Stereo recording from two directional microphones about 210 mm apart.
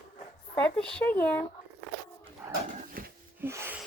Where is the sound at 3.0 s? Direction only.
40° right (ahead or behind).